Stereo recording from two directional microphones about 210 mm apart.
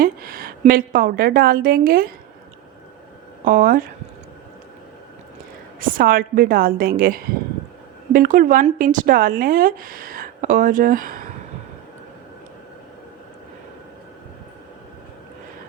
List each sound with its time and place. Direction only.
0.0 s a woman's voice: 45° right (ahead or behind)
3.4 s speech: 40° right (ahead or behind)
5.8 s a woman's voice: 40° right (ahead or behind)